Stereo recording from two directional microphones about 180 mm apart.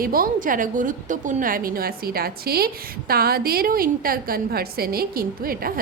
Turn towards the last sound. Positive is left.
turn(degrees=-55)  # may be behind; listen again after turning